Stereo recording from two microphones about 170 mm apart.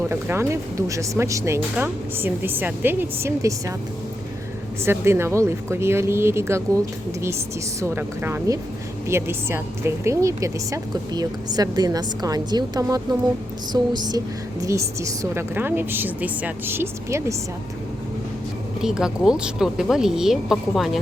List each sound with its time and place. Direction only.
0.1 s speech: 15° right (ahead or behind)
4.9 s speech: 15° right (ahead or behind)
7.8 s speech: 15° right (ahead or behind)
18.8 s speech: 5° right (ahead or behind)